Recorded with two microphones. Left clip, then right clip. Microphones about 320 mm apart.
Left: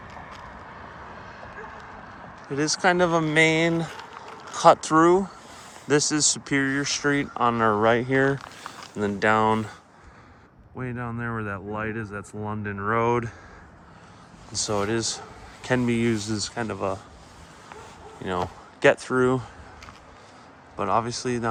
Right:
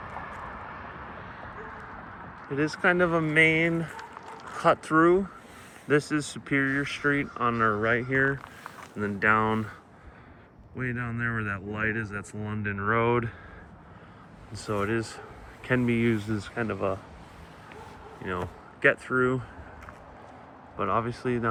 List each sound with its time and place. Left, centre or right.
0.4 s vehicle: centre
2.5 s speech: centre
10.8 s speech: centre
14.5 s speech: centre
18.2 s speech: centre
20.7 s speech: centre